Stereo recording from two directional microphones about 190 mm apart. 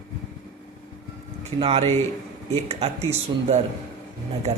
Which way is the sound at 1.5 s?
30° right (ahead or behind).